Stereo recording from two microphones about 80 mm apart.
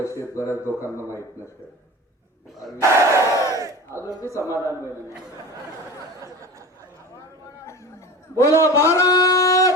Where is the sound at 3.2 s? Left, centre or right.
Left.